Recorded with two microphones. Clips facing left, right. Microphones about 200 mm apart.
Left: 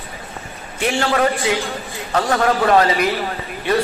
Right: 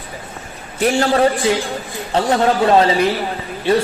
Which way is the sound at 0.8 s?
40° right (ahead or behind).